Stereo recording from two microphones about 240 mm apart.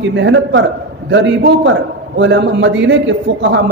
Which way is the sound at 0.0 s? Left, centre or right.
Right.